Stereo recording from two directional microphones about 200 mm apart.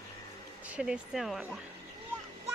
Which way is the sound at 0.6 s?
5° right (ahead or behind).